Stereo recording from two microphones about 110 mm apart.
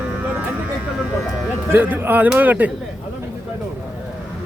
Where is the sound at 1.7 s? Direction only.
20° right (ahead or behind).